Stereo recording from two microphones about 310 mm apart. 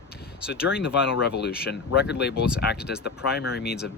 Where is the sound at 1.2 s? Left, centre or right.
Left.